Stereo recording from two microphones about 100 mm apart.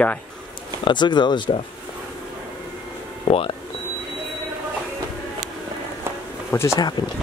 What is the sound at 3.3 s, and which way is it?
Speech, 70° left (ahead or behind).